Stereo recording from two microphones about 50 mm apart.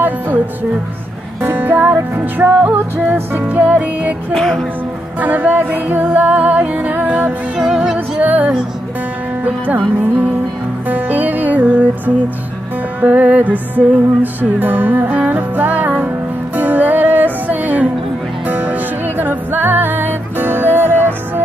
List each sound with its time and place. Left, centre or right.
1.5 s music: right
2.6 s music: right
4.3 s music: centre
5.2 s music: right
7.5 s music: centre
8.2 s music: right
13.0 s music: right